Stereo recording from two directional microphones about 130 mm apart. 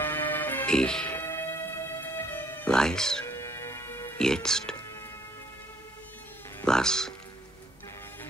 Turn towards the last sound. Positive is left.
turn(degrees=5)  # may be behind; listen again after turning